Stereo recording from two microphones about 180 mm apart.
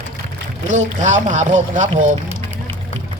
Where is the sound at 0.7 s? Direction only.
40° right (ahead or behind).